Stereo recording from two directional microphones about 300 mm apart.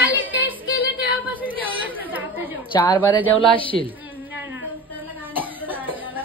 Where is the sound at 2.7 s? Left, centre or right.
Centre.